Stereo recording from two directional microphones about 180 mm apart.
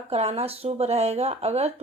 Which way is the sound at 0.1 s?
35° right (ahead or behind).